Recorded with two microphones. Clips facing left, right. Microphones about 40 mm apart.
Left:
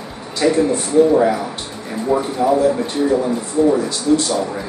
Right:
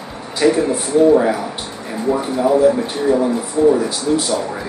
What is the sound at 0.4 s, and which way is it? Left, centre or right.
Speech, centre.